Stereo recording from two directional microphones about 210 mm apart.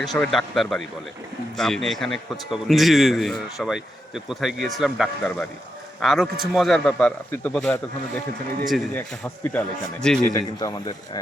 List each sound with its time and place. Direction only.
0.0 s a man's voice: centre (ahead or behind)
10.6 s speech: 20° left (ahead or behind)